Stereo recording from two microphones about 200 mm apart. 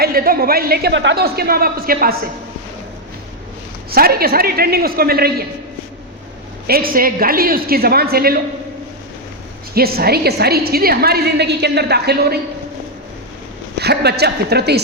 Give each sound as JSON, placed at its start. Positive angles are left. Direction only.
{"t": 0.0, "sound": "a woman's voice", "side_deg": -50}
{"t": 3.9, "sound": "a woman's voice", "side_deg": -50}
{"t": 6.7, "sound": "a woman's voice", "side_deg": -45}
{"t": 9.7, "sound": "a woman's voice", "side_deg": -50}
{"t": 13.7, "sound": "a man's voice", "side_deg": -55}